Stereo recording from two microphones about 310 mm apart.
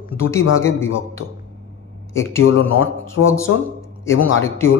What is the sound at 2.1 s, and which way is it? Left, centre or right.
Speech, left.